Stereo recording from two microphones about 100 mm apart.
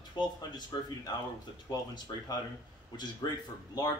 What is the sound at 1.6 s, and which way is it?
Speech, 40° left (ahead or behind).